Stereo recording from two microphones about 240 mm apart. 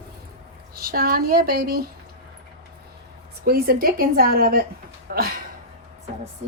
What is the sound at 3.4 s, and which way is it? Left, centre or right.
A woman's voice, right.